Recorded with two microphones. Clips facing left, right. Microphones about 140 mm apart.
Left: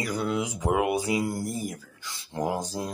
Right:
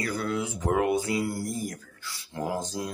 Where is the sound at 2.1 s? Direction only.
20° left (ahead or behind).